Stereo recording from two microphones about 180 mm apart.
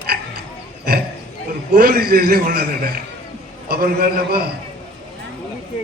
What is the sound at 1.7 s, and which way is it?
A man's voice, 55° right (ahead or behind).